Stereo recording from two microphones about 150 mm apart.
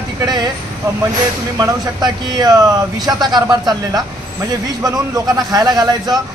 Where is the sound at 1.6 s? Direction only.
30° right (ahead or behind).